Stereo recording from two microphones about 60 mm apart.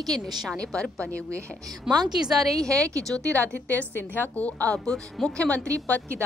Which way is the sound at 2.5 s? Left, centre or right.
Right.